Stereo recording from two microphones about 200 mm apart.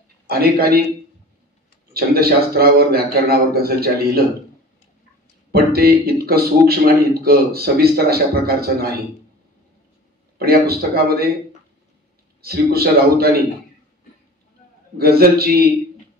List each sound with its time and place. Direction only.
0.3 s speech: 50° right (ahead or behind)
2.0 s speech: 50° right (ahead or behind)
5.5 s speech: 50° right (ahead or behind)
10.3 s speech: 50° right (ahead or behind)
12.4 s speech: 50° right (ahead or behind)
15.0 s speech: 50° right (ahead or behind)